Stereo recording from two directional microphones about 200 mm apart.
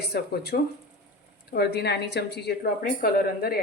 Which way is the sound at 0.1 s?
55° left (ahead or behind).